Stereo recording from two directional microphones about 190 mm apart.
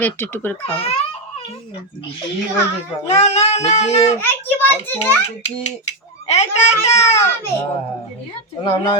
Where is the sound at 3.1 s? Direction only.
35° left (ahead or behind).